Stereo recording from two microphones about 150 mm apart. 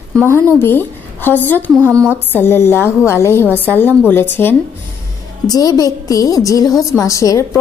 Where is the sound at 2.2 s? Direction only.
15° left (ahead or behind).